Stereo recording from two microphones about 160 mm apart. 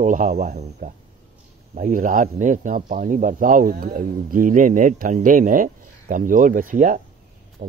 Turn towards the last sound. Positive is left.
turn(degrees=-55)  # may be behind; listen again after turning